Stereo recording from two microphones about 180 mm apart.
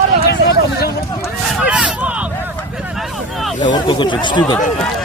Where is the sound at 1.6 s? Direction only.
5° right (ahead or behind).